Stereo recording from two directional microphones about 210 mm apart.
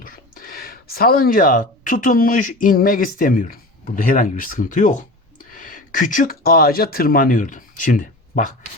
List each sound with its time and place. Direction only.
0.0 s speech: 45° left (ahead or behind)